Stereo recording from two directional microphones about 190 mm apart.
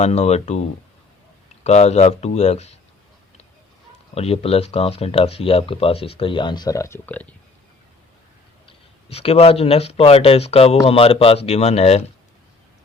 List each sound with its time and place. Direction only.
0.0 s speech: 35° left (ahead or behind)
4.1 s speech: 30° left (ahead or behind); by 7.3 s 10° left (ahead or behind)
9.0 s speech: 30° left (ahead or behind)